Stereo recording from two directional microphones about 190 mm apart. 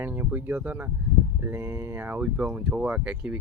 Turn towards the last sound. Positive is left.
turn(degrees=-5)  # may be behind; listen again after turning